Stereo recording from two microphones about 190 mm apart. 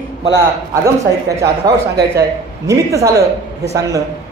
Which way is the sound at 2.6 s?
15° right (ahead or behind).